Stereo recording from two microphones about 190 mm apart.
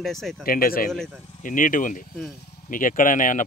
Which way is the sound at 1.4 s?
45° left (ahead or behind).